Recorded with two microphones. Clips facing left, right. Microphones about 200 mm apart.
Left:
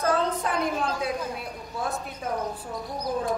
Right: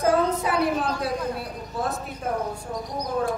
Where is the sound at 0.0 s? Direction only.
10° right (ahead or behind).